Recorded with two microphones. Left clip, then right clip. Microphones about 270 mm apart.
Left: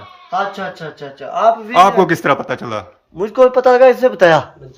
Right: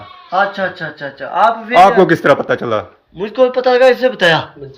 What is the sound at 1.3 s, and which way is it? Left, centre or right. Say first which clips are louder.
A man's voice: right 1 dB; centre.